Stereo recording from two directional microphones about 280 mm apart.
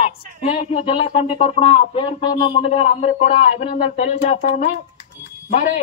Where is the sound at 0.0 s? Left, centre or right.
Left.